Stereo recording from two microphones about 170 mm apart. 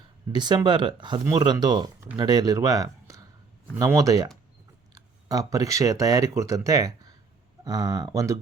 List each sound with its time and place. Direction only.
0.3 s speech: 25° right (ahead or behind)